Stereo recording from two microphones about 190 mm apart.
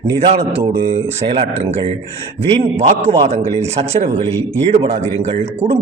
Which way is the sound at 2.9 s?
35° right (ahead or behind).